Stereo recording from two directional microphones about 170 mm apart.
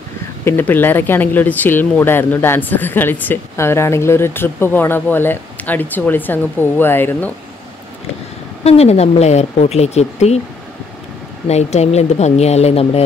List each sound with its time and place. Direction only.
0.5 s speech: 10° left (ahead or behind)
8.6 s a woman's voice: 40° left (ahead or behind)
11.4 s a woman's voice: 40° left (ahead or behind)